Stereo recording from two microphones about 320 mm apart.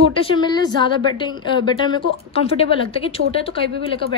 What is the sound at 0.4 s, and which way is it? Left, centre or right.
A woman's voice, centre.